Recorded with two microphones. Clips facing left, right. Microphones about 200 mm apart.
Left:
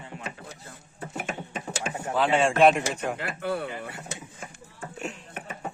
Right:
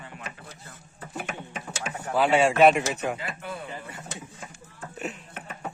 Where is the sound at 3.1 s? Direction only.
70° left (ahead or behind).